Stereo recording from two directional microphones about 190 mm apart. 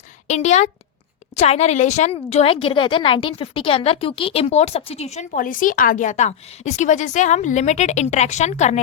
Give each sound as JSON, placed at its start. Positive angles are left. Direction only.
{"t": 0.3, "sound": "a woman's voice", "side_deg": 35}